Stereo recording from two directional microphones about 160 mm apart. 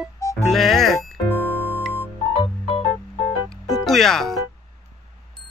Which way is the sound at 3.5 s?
Centre (ahead or behind).